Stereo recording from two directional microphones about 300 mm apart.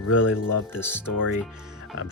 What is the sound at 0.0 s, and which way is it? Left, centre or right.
Speech, left.